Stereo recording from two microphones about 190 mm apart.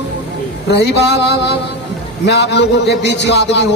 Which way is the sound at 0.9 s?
65° left (ahead or behind).